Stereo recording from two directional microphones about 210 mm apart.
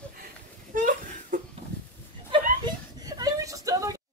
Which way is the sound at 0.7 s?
40° right (ahead or behind).